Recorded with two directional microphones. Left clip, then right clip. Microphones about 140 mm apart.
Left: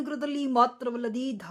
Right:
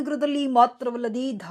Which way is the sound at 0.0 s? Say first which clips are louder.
Right 6 dB; 20° right (ahead or behind).